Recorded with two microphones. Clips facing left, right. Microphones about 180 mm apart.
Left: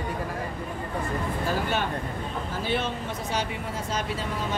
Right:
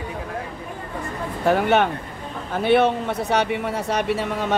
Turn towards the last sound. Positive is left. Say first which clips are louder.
# right 8 dB
turn(degrees=-70)  # may be behind; listen again after turning